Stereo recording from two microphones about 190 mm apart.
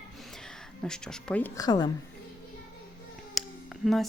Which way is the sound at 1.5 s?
20° left (ahead or behind).